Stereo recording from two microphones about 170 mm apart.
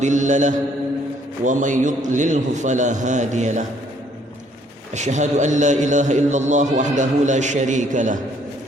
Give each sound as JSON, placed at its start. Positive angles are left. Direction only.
{"t": 0.0, "sound": "a man's voice", "side_deg": -45}
{"t": 4.9, "sound": "a man's voice", "side_deg": -45}